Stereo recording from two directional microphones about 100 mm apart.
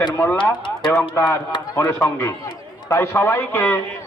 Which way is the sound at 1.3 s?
40° left (ahead or behind).